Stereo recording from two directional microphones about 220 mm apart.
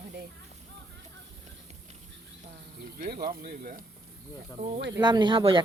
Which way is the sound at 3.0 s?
40° right (ahead or behind).